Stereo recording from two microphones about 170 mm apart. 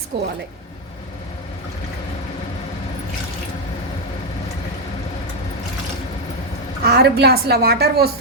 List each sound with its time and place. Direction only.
0.1 s a woman's voice: 75° right (ahead or behind)
6.8 s a woman's voice: 70° right (ahead or behind)